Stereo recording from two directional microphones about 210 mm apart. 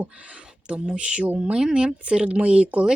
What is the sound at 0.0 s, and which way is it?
Speech, 5° right (ahead or behind).